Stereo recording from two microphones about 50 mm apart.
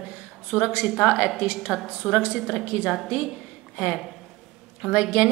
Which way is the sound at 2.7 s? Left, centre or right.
Right.